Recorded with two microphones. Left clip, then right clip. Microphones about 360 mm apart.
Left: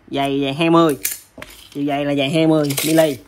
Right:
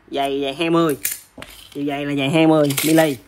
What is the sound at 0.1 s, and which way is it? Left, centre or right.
Speech, centre.